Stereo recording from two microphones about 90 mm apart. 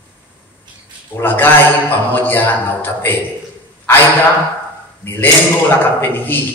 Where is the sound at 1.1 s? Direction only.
25° left (ahead or behind).